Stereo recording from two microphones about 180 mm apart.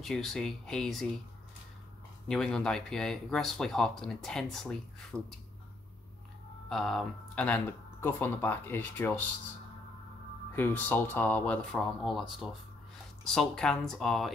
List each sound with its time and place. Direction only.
0.0 s speech: centre (ahead or behind)
2.2 s speech: 5° left (ahead or behind)
6.7 s speech: centre (ahead or behind)
10.5 s speech: 10° left (ahead or behind)